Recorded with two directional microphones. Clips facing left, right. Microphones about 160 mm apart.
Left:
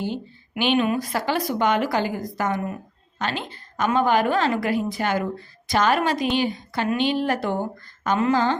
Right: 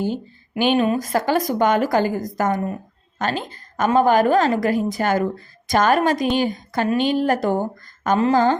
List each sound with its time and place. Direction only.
0.6 s a woman's voice: 40° right (ahead or behind)